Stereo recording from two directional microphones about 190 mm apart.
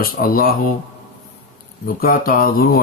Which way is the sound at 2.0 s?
50° left (ahead or behind).